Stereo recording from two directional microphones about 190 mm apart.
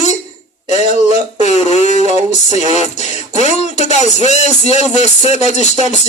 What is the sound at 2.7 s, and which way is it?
Music, 35° left (ahead or behind).